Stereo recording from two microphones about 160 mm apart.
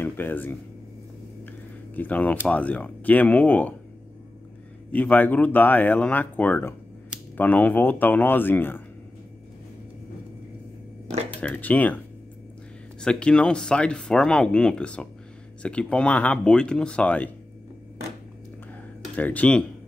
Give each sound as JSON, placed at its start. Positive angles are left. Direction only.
{"t": 0.0, "sound": "speech", "side_deg": 10}
{"t": 2.0, "sound": "speech", "side_deg": 10}
{"t": 4.9, "sound": "speech", "side_deg": 10}
{"t": 11.4, "sound": "speech", "side_deg": 10}
{"t": 13.0, "sound": "speech", "side_deg": 5}
{"t": 19.1, "sound": "speech", "side_deg": 10}